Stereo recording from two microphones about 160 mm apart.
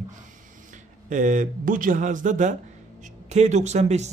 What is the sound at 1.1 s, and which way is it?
Speech, 50° right (ahead or behind).